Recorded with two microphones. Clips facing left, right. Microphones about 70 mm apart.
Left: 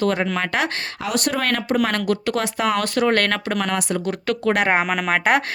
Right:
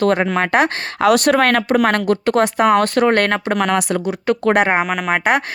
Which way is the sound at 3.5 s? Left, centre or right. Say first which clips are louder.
Right 5 dB; right.